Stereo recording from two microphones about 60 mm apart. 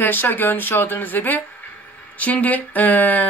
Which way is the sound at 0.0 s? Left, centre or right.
Left.